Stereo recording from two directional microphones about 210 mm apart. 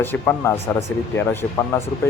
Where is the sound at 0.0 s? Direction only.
10° left (ahead or behind).